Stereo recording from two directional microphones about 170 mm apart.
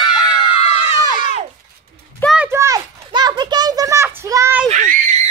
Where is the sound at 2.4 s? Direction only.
15° right (ahead or behind).